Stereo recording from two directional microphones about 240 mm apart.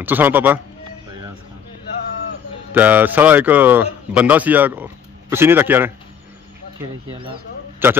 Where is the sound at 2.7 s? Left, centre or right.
Centre.